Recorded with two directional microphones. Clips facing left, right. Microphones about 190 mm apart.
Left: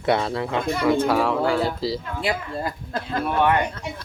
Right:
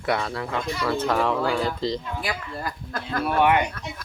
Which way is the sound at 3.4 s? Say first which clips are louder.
Even; 15° right (ahead or behind).